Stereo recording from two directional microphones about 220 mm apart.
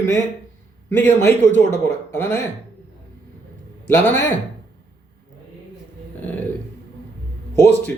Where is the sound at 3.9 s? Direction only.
10° left (ahead or behind).